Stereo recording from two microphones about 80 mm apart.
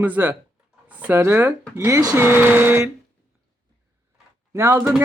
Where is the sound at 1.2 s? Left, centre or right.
Right.